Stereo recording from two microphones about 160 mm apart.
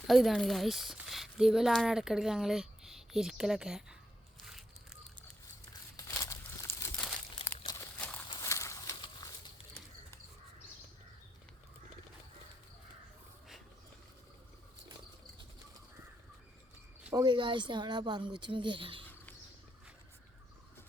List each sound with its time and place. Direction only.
0.1 s speech: centre (ahead or behind)
6.1 s crumpling: 20° left (ahead or behind)
6.9 s crumpling: 5° left (ahead or behind)
7.6 s a sound: 25° left (ahead or behind)
7.9 s walk: 10° left (ahead or behind)
8.3 s a sound: 20° left (ahead or behind)
17.2 s speech: 30° right (ahead or behind)